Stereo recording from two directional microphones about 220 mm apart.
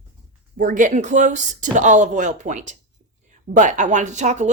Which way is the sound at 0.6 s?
40° right (ahead or behind).